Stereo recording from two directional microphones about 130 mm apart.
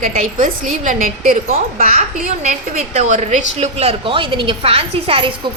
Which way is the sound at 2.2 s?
65° right (ahead or behind).